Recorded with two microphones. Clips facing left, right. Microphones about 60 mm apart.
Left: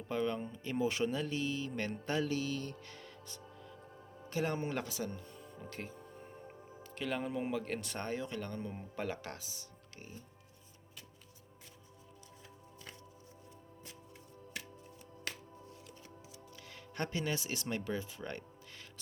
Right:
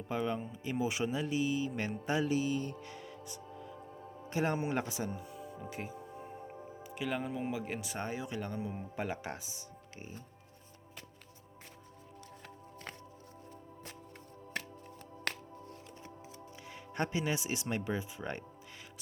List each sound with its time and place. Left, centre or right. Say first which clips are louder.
0.1 s speech: even; centre
4.3 s music: right 3 dB; right; by 7.6 s centre
7.6 s speech: right 1 dB; centre; by 10.2 s right
14.5 s music: right 6 dB; right
16.6 s speech: right 4 dB; right